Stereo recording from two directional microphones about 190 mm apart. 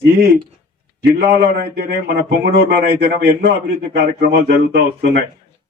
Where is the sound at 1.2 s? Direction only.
55° right (ahead or behind).